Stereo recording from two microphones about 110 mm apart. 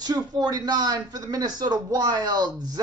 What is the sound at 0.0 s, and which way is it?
Speech, 40° right (ahead or behind).